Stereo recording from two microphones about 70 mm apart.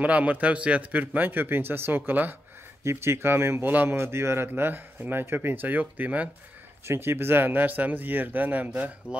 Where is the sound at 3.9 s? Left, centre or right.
Right.